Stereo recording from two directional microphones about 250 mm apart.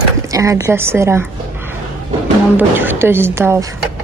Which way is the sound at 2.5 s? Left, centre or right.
Centre.